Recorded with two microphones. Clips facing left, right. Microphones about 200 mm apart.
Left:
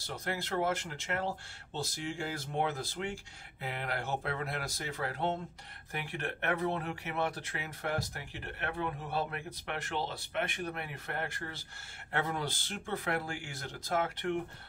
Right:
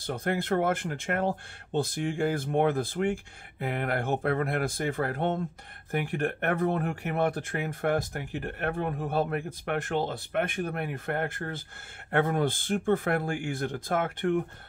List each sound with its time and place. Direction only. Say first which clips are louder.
0.0 s speech: right 8 dB; 55° right (ahead or behind)